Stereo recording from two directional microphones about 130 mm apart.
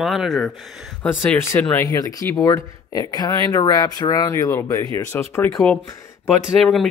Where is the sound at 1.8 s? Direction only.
25° left (ahead or behind).